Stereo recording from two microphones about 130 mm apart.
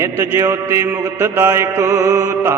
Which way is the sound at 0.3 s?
25° right (ahead or behind).